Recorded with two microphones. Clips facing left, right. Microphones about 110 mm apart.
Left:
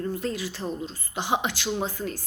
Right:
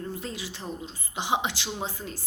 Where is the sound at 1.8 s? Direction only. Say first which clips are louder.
Left 5 dB; 55° left (ahead or behind).